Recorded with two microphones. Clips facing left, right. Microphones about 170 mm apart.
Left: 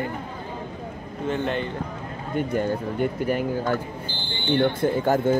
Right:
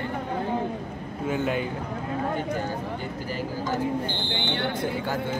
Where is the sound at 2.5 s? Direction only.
60° left (ahead or behind).